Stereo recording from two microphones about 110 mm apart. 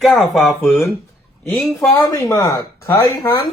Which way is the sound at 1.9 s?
30° left (ahead or behind).